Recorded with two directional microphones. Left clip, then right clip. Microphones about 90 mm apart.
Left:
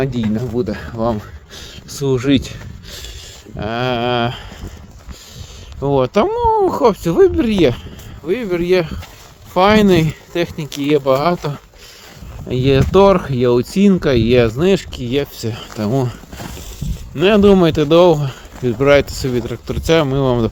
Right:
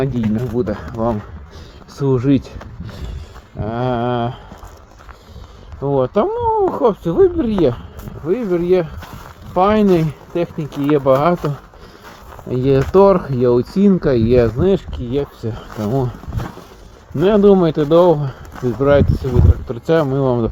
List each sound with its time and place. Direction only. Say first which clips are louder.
0.3 s speech: even; 15° left (ahead or behind)
3.6 s speech: left 1 dB; 55° left (ahead or behind)
5.8 s speech: left 2 dB; 35° left (ahead or behind)
12.5 s speech: left 1 dB; 5° left (ahead or behind); by 14.8 s 20° left (ahead or behind)
14.9 s speech: left 2 dB; 30° left (ahead or behind)
15.9 s speech: left 1 dB; 30° left (ahead or behind)
17.2 s speech: left 1 dB; 25° left (ahead or behind)